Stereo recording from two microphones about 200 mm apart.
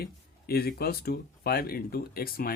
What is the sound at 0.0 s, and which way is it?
Speech, 50° left (ahead or behind).